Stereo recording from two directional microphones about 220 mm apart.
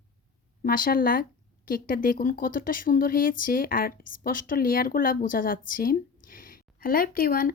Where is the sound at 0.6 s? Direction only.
40° left (ahead or behind).